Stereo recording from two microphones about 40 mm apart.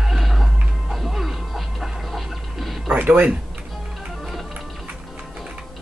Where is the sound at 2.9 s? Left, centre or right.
Right.